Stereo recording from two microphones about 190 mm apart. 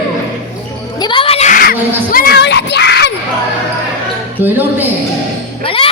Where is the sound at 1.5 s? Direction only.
50° left (ahead or behind).